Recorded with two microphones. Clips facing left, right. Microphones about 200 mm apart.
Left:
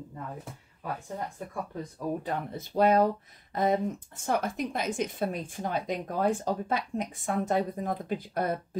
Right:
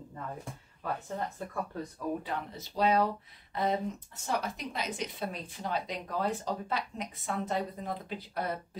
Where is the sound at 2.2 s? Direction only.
55° left (ahead or behind).